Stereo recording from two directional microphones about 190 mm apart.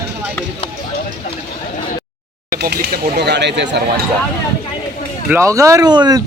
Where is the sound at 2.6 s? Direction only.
60° right (ahead or behind).